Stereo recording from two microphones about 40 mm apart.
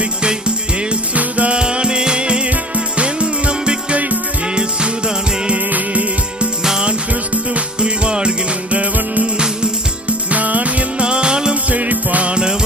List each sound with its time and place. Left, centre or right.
0.2 s music: right
5.7 s music: right
7.8 s music: right
8.7 s music: right
11.7 s music: right
12.3 s music: right